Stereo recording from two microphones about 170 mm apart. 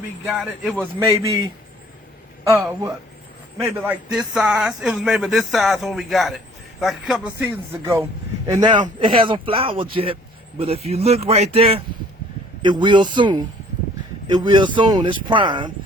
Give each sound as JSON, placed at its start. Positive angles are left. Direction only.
{"t": 0.3, "sound": "speech", "side_deg": -5}
{"t": 0.9, "sound": "speech", "side_deg": -15}
{"t": 3.6, "sound": "speech", "side_deg": -10}
{"t": 7.4, "sound": "speech", "side_deg": -15}